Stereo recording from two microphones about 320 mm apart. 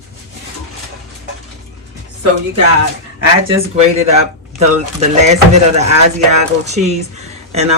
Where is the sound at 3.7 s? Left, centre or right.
Centre.